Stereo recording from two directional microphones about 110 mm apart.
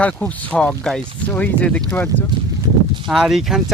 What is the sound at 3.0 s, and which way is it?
Speech, centre (ahead or behind).